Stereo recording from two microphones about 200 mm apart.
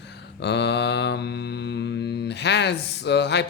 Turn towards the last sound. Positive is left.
turn(degrees=60)  # may be behind; listen again after turning